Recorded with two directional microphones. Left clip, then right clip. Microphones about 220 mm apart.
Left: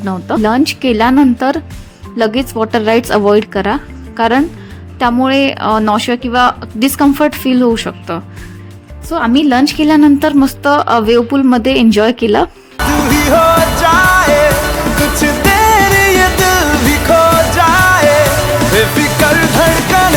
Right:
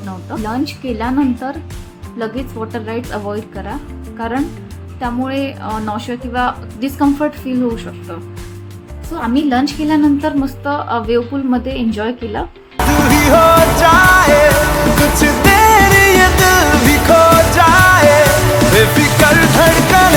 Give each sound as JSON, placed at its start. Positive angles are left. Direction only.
{"t": 0.0, "sound": "a woman's voice", "side_deg": 45}
{"t": 12.9, "sound": "music", "side_deg": 0}